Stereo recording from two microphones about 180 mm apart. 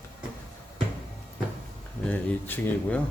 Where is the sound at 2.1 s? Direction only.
10° left (ahead or behind).